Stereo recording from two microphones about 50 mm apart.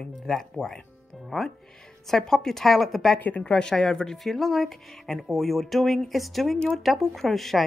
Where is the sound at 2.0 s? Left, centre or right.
Centre.